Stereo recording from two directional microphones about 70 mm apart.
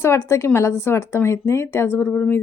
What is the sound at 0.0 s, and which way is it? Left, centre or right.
Speech, left.